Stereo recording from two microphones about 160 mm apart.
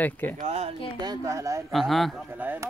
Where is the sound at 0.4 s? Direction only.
40° right (ahead or behind).